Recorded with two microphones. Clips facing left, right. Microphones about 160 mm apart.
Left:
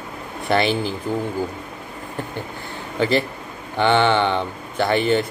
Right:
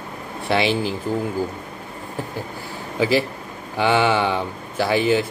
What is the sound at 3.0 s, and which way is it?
Speech, 5° right (ahead or behind).